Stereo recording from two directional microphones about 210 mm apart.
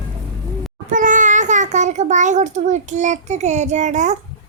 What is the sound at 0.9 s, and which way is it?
A child's voice, 40° right (ahead or behind).